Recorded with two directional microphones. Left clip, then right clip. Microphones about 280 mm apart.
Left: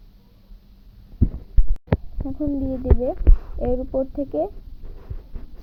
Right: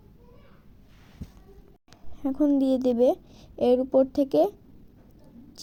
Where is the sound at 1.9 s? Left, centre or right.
Right.